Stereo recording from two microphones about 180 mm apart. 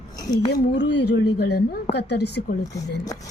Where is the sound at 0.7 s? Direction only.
75° left (ahead or behind).